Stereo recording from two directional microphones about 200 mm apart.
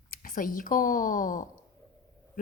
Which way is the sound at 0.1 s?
45° left (ahead or behind).